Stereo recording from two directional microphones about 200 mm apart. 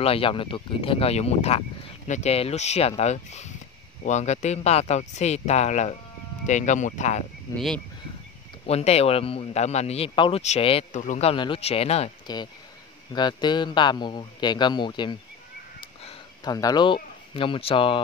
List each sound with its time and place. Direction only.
0.0 s speech: 30° left (ahead or behind)
7.5 s speech: 5° left (ahead or behind)
8.6 s speech: 30° left (ahead or behind)
12.3 s speech: 20° left (ahead or behind)
15.8 s a sound: 25° left (ahead or behind)
16.5 s speech: 20° left (ahead or behind)